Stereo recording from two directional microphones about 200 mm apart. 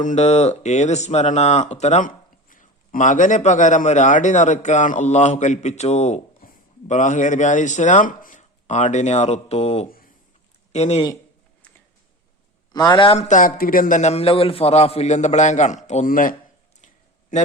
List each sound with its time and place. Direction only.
0.0 s speech: 35° left (ahead or behind)
12.7 s speech: 20° left (ahead or behind); by 16.3 s 40° left (ahead or behind)